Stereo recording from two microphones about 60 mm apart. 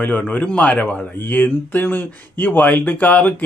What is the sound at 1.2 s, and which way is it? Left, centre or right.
A man's voice, left.